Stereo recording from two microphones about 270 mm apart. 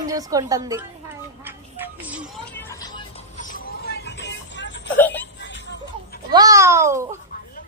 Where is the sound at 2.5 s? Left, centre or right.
Centre.